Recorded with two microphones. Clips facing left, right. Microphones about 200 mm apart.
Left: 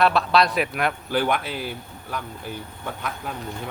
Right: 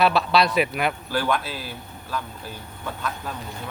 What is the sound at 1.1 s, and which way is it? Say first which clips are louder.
Speech: left 1 dB; 20° left (ahead or behind).